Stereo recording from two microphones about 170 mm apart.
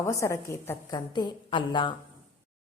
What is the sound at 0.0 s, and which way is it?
A woman's voice, 20° left (ahead or behind).